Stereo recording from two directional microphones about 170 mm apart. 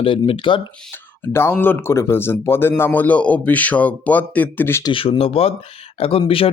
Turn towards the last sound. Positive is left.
turn(degrees=35)  # may be behind; listen again after turning